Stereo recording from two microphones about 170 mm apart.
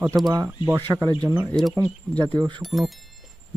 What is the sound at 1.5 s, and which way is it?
Speech, centre (ahead or behind).